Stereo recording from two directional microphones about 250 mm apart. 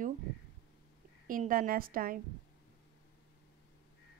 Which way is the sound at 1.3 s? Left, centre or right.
Right.